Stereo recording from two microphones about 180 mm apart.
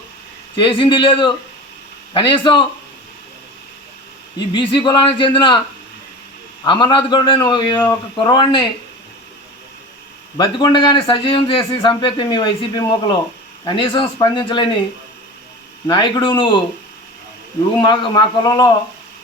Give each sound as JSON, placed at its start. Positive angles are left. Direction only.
{"t": 0.5, "sound": "a man's voice", "side_deg": 30}
{"t": 4.4, "sound": "a man's voice", "side_deg": 25}
{"t": 6.7, "sound": "a man's voice", "side_deg": 25}
{"t": 10.3, "sound": "a man's voice", "side_deg": 25}
{"t": 15.9, "sound": "a man's voice", "side_deg": 25}
{"t": 17.7, "sound": "a man's voice", "side_deg": 25}